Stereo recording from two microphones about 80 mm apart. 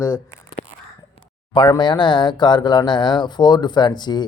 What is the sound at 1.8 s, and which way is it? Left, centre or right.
A man's voice, left.